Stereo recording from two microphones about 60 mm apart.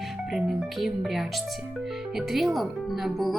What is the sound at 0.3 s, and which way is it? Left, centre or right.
Speech, centre.